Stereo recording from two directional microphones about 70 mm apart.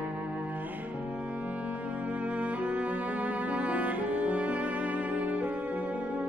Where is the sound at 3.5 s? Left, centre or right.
Centre.